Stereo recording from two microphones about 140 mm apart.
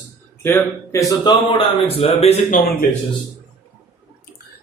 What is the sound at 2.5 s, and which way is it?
Speech, 90° left.